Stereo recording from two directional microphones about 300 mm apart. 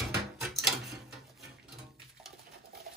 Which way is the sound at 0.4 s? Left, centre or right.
Centre.